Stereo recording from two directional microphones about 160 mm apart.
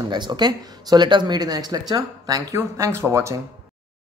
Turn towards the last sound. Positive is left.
turn(degrees=-20)  # may be behind; listen again after turning